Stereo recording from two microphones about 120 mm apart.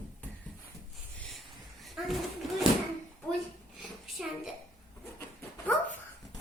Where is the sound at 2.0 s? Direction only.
5° right (ahead or behind).